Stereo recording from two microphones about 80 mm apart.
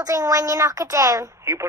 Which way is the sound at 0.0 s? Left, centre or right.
Right.